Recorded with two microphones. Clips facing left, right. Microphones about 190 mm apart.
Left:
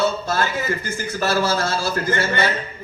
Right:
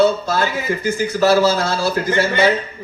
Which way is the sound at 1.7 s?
60° right (ahead or behind).